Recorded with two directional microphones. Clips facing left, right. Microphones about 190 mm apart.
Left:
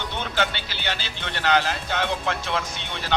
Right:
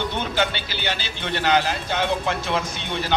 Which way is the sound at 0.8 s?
10° right (ahead or behind).